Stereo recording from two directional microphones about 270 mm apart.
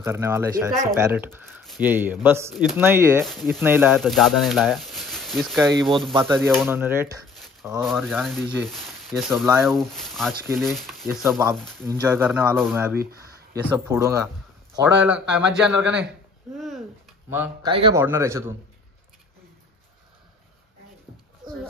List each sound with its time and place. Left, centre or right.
0.0 s speech: centre
16.5 s a sound: centre
17.6 s speech: centre